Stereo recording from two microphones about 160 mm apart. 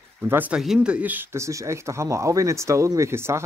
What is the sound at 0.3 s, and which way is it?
Speech, 10° right (ahead or behind).